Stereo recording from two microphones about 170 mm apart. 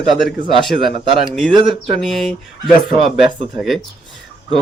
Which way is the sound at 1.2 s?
Centre (ahead or behind).